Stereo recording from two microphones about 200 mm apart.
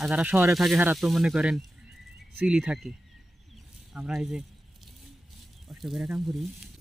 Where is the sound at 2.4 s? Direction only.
5° right (ahead or behind).